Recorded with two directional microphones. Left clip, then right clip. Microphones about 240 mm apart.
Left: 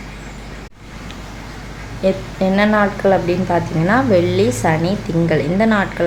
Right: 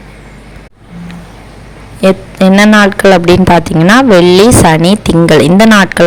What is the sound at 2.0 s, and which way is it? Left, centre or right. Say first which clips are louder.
A woman's voice: right 9 dB; right.